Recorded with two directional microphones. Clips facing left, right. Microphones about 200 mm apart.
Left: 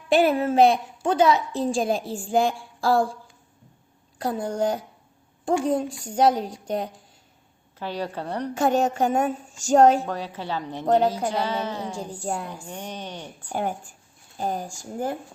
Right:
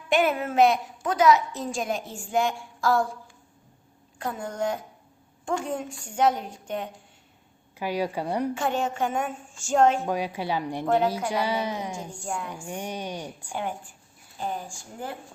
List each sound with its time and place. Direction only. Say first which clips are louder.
0.1 s a woman's voice: left 4 dB; 35° left (ahead or behind)
4.2 s a woman's voice: left 5 dB; 35° left (ahead or behind)
7.8 s speech: right 2 dB; 10° right (ahead or behind)
8.5 s a woman's voice: left 6 dB; 40° left (ahead or behind)
10.1 s speech: right 2 dB; 10° right (ahead or behind)
10.8 s a woman's voice: left 4 dB; 35° left (ahead or behind)
11.3 s speech: even; 10° right (ahead or behind)
11.9 s a woman's voice: left 4 dB; 35° left (ahead or behind)
12.6 s speech: right 2 dB; 10° right (ahead or behind)
13.5 s a woman's voice: left 5 dB; 45° left (ahead or behind)